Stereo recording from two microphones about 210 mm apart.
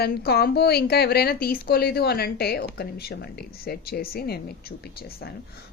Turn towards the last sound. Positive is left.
turn(degrees=50)  # may be behind; listen again after turning